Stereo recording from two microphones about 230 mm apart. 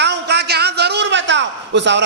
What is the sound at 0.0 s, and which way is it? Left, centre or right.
A man's voice, right.